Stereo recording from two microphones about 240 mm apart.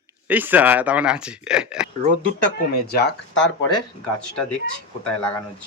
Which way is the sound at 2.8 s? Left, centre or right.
Left.